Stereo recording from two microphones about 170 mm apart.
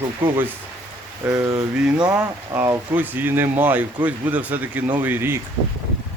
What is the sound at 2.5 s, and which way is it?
Speech, 15° right (ahead or behind).